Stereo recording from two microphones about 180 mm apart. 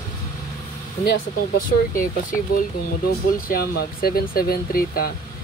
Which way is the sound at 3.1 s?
55° left (ahead or behind).